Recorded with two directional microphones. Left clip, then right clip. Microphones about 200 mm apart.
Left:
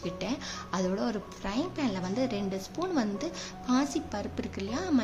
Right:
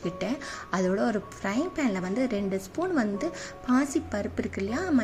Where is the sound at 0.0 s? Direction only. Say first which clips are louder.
Right 3 dB; 15° right (ahead or behind).